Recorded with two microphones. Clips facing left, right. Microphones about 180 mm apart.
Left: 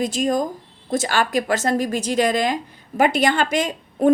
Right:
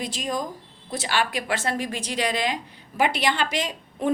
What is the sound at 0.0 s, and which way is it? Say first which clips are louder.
A woman's voice: left 8 dB; 45° left (ahead or behind).